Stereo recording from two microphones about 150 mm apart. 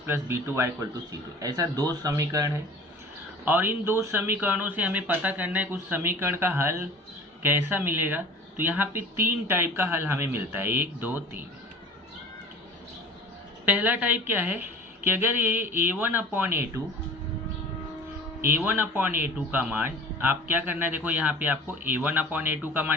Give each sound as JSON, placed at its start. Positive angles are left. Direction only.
{"t": 0.0, "sound": "a man's voice", "side_deg": -15}
{"t": 13.7, "sound": "a man's voice", "side_deg": -10}
{"t": 18.4, "sound": "a man's voice", "side_deg": -15}